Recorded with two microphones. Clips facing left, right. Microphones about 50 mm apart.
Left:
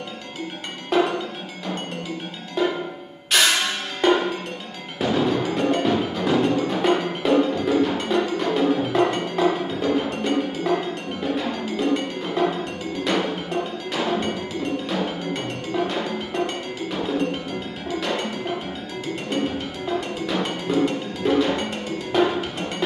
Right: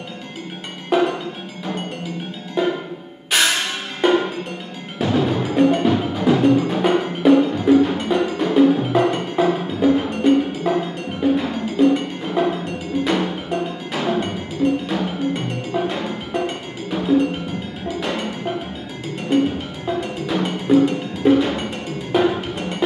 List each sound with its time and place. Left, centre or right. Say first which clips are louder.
0.9 s music: right 2 dB; centre
2.6 s music: right 2 dB; centre
4.0 s percussion: right 2 dB; centre
4.9 s music: right 2 dB; centre
19.3 s music: right 8 dB; centre